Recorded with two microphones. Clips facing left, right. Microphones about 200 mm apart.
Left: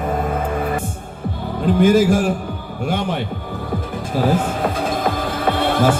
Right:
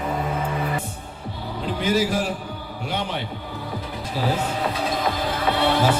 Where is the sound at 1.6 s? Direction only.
50° left (ahead or behind).